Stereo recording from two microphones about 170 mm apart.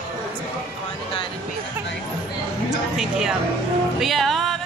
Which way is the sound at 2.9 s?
5° right (ahead or behind).